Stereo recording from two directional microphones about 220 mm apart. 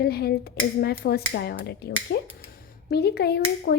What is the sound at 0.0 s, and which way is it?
Speech, 45° left (ahead or behind).